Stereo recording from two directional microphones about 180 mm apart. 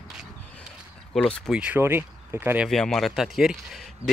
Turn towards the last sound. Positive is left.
turn(degrees=0)  # may be behind; listen again after turning